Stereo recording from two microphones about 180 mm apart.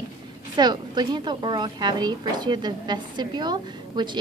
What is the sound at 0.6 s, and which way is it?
Speech, 25° right (ahead or behind).